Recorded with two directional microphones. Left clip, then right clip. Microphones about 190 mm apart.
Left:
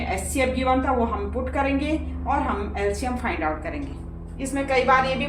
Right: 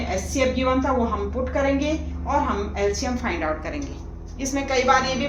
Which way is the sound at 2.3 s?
15° right (ahead or behind).